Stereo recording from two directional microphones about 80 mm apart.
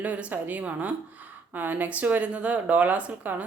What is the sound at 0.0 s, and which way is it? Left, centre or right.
Speech, centre.